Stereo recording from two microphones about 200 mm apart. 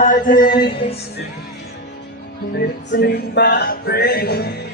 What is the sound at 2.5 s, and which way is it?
Music, 55° left (ahead or behind).